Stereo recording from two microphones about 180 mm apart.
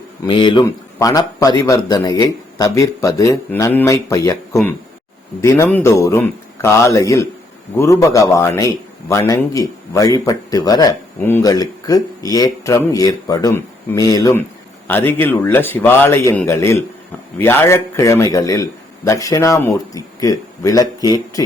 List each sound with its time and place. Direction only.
0.3 s a man's voice: 25° left (ahead or behind)
5.4 s a man's voice: 15° left (ahead or behind)